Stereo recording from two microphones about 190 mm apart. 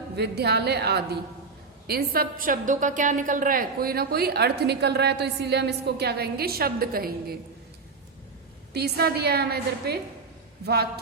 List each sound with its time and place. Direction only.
0.2 s a woman's voice: 60° right (ahead or behind)
8.7 s a woman's voice: 55° right (ahead or behind)